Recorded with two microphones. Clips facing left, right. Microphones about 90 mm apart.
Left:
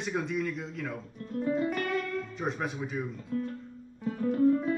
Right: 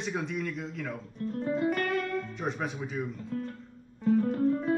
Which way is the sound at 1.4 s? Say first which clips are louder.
Left 1 dB; 40° right (ahead or behind).